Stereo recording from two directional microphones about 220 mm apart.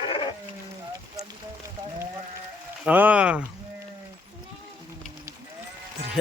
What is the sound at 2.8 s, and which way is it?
Speech, 5° right (ahead or behind).